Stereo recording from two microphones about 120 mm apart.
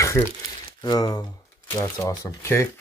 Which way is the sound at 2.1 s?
30° left (ahead or behind).